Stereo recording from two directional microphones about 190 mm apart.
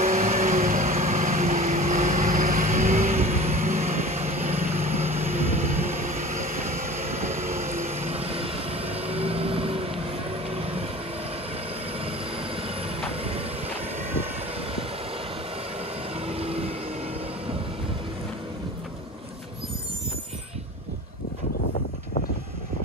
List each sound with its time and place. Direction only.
0.0 s vehicle: 35° right (ahead or behind)
16.3 s vehicle: 30° right (ahead or behind)